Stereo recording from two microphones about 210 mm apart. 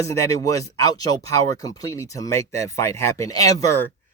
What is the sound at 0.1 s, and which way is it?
Speech, 15° left (ahead or behind).